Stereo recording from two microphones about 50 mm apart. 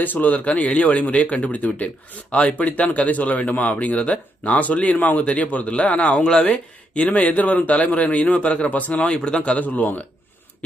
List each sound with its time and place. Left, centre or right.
0.0 s speech: left